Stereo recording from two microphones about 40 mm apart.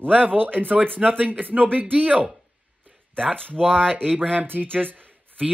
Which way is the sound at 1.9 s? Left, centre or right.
Right.